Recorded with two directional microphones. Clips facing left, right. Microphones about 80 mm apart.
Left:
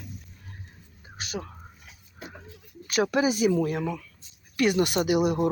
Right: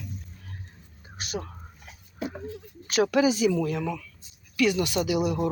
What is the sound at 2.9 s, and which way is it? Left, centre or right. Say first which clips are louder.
Speech: right 2 dB; left.